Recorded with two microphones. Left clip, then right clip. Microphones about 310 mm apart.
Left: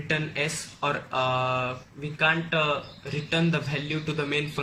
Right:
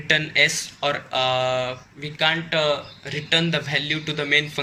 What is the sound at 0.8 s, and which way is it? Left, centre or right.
Speech, right.